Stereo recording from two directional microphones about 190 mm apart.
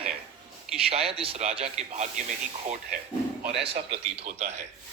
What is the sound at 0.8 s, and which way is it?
Speech, 30° right (ahead or behind).